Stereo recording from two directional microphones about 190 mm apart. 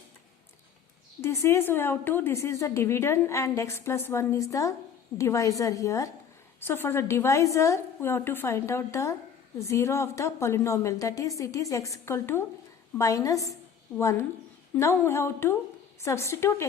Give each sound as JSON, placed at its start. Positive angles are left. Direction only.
{"t": 1.2, "sound": "a woman's voice", "side_deg": 15}